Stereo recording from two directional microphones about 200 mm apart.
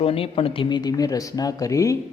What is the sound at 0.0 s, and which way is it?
Speech, 30° left (ahead or behind).